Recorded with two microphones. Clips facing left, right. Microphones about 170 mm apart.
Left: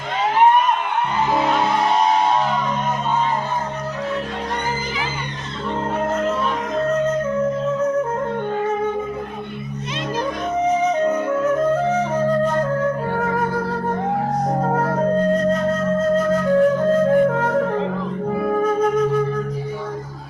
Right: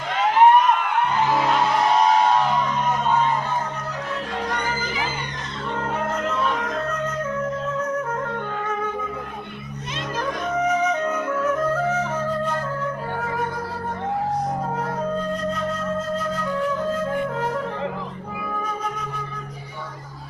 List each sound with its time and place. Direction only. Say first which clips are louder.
11.0 s music: left 5 dB; 30° left (ahead or behind)
12.5 s music: left 7 dB; 45° left (ahead or behind)
14.4 s music: left 6 dB; 50° left (ahead or behind)
14.9 s flute: left 8 dB; 45° left (ahead or behind)
18.3 s music: left 13 dB; 45° left (ahead or behind)